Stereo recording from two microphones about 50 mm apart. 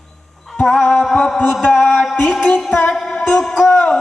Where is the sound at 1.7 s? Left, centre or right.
Centre.